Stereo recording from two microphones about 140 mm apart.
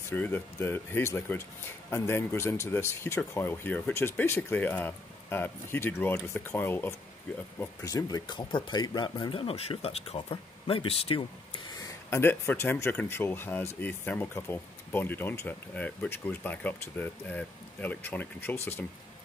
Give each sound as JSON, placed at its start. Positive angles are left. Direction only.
{"t": 0.1, "sound": "speech", "side_deg": 15}
{"t": 7.5, "sound": "speech", "side_deg": 25}